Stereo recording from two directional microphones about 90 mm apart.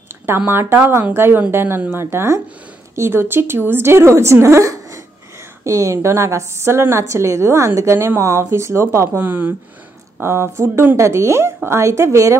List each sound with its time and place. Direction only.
0.5 s a woman's voice: 25° right (ahead or behind)